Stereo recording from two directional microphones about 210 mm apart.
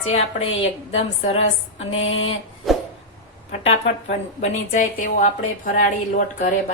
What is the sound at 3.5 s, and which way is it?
A woman's voice, 35° left (ahead or behind).